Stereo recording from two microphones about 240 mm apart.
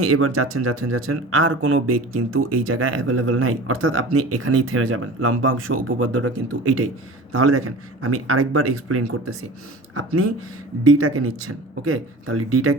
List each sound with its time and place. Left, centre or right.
0.0 s speech: right